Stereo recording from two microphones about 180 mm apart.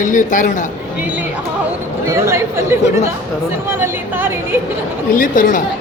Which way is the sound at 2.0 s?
15° right (ahead or behind).